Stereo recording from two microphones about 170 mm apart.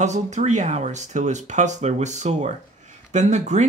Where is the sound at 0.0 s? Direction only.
45° right (ahead or behind).